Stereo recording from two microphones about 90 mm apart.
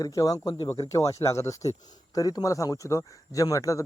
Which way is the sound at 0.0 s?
40° left (ahead or behind).